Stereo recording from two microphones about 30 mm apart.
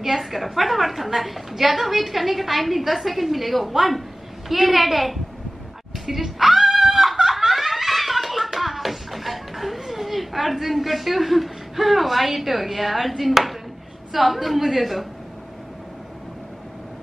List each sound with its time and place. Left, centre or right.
0.0 s a woman's voice: centre
6.0 s music: centre
7.2 s laughter: centre
8.5 s a sound: centre
14.1 s a woman's voice: centre